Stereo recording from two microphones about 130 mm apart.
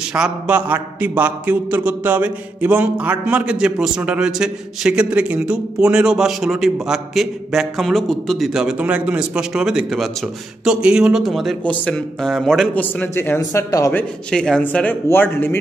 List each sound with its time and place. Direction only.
0.1 s a sound: 10° right (ahead or behind)
11.9 s speech: centre (ahead or behind)
12.7 s speech: 15° left (ahead or behind)
13.9 s speech: 5° left (ahead or behind)